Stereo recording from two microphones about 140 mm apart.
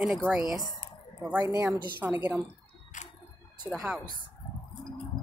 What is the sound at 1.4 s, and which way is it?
Speech, 25° right (ahead or behind).